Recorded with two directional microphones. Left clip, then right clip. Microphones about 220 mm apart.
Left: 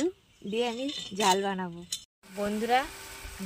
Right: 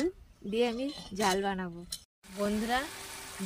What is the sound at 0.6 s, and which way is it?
Speech, 20° left (ahead or behind).